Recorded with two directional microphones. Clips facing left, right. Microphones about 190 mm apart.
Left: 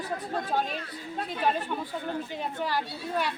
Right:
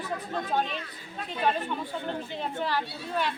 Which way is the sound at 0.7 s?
45° left (ahead or behind).